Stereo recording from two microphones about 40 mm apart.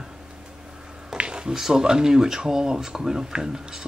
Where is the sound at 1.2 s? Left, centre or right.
Right.